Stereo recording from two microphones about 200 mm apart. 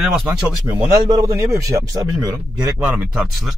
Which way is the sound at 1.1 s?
15° right (ahead or behind).